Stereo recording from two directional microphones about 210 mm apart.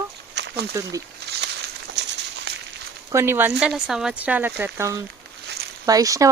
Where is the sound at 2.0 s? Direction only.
55° right (ahead or behind).